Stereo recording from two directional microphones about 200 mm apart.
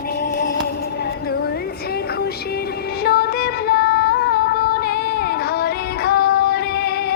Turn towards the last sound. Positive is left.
turn(degrees=50)  # may be behind; listen again after turning